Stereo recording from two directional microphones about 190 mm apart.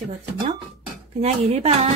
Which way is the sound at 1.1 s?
35° right (ahead or behind).